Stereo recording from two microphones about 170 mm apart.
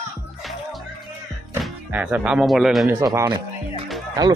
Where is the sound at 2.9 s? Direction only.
15° right (ahead or behind).